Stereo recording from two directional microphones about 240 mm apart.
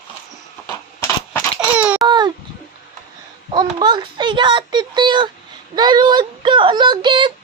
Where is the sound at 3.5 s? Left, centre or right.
Centre.